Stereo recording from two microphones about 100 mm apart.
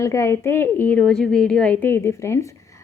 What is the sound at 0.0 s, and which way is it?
A woman's voice, 30° left (ahead or behind).